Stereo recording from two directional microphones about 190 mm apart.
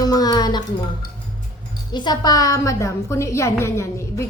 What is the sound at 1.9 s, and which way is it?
A woman's voice, 25° left (ahead or behind).